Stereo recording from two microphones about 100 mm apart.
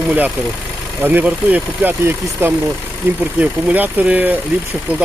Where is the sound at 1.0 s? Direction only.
15° right (ahead or behind).